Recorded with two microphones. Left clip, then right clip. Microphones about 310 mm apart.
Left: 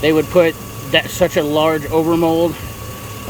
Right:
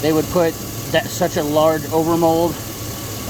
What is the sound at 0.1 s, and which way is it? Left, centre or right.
Speech, centre.